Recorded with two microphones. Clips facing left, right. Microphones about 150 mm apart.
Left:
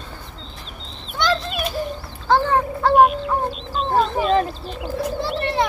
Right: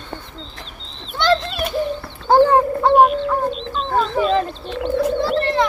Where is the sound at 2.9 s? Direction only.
Centre (ahead or behind).